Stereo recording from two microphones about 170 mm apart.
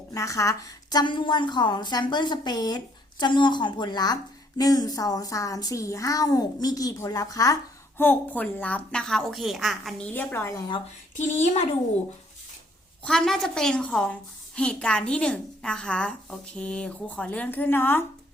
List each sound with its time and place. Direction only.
0.1 s a woman's voice: 20° left (ahead or behind)
11.3 s a child's voice: 40° left (ahead or behind)
13.1 s a woman's voice: centre (ahead or behind)